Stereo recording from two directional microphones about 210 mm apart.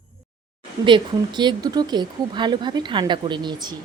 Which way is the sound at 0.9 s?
20° right (ahead or behind).